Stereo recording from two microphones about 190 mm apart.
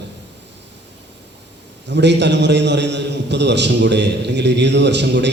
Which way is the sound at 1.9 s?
65° right (ahead or behind).